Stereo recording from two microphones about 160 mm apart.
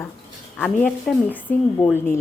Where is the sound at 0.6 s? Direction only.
5° left (ahead or behind).